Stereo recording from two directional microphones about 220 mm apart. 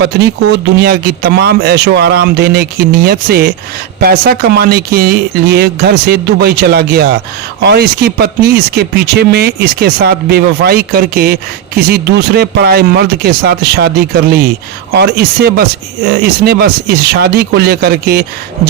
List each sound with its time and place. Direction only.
0.0 s speech: 50° right (ahead or behind)